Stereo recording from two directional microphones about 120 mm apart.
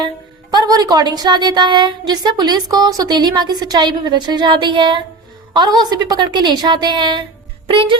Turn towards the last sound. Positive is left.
turn(degrees=-45)  # may be behind; listen again after turning